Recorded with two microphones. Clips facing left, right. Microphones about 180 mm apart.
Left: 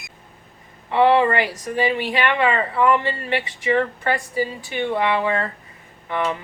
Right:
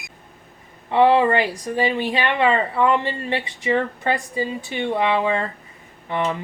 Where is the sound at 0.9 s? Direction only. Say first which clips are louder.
Right 1 dB; 20° right (ahead or behind).